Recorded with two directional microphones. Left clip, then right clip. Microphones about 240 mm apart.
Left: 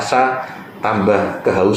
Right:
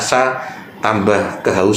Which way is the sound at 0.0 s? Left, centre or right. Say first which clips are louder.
Even; right.